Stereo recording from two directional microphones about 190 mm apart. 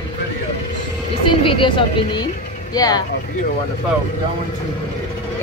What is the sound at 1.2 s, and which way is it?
Speech, 25° left (ahead or behind).